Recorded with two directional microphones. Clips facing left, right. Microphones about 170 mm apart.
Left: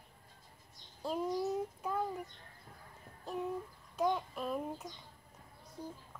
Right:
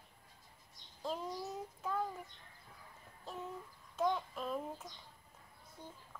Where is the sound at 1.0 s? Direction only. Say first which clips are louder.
Left 4 dB; 10° left (ahead or behind).